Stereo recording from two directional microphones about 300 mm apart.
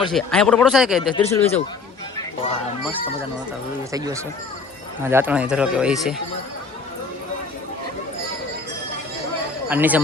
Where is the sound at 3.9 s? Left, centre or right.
Centre.